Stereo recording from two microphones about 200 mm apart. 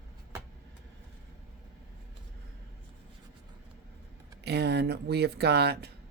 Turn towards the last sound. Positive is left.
turn(degrees=-55)  # may be behind; listen again after turning